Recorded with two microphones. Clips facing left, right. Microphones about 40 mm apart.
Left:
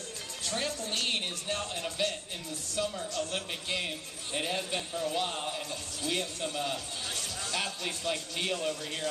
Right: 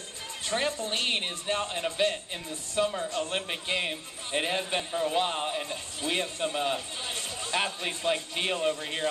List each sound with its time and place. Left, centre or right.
0.5 s a man's voice: right